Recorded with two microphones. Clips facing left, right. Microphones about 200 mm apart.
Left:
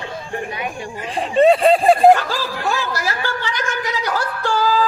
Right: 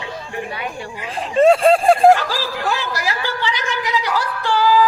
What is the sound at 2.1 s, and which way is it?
Speech, 50° left (ahead or behind).